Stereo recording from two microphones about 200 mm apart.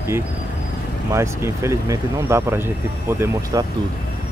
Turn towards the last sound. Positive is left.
turn(degrees=-20)  # may be behind; listen again after turning